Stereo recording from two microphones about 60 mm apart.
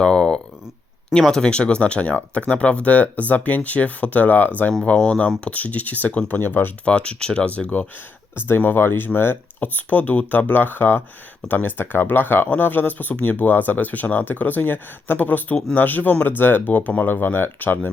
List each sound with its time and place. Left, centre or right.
0.0 s a sound: centre
1.2 s speech: centre; by 4.7 s left
4.8 s speech: centre
5.5 s speech: left
6.8 s speech: centre
8.4 s speech: left